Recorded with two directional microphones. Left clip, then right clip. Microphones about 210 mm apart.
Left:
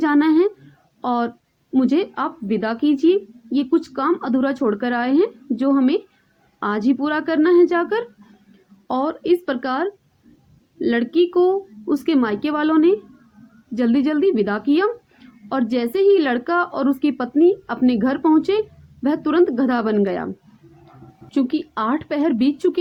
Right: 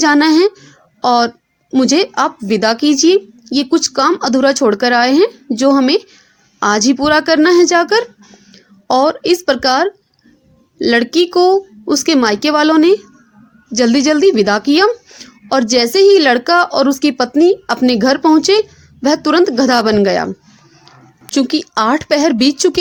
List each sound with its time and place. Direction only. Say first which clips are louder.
0.0 s speech: right 6 dB; 40° right (ahead or behind)
21.3 s speech: right 7 dB; 40° right (ahead or behind)